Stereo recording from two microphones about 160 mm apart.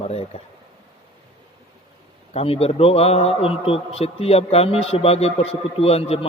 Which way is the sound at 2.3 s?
40° left (ahead or behind).